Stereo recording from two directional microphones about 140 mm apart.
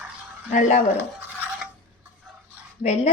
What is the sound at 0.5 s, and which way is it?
Speech, 60° left (ahead or behind).